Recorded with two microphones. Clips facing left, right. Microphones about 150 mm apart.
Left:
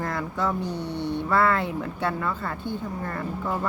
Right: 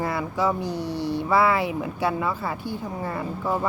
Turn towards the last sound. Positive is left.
turn(degrees=-10)  # may be behind; listen again after turning